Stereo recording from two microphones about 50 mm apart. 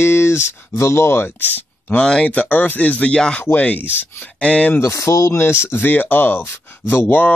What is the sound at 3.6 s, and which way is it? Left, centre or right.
Speech, left.